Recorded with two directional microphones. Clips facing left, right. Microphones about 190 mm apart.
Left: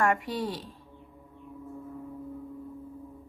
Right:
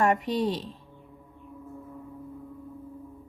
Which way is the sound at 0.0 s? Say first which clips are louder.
Right 3 dB; 20° right (ahead or behind).